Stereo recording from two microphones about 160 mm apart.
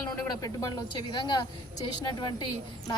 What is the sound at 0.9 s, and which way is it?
Speech, 25° left (ahead or behind).